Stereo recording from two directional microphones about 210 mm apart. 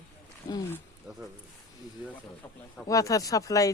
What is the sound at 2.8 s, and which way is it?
Speech, 15° left (ahead or behind).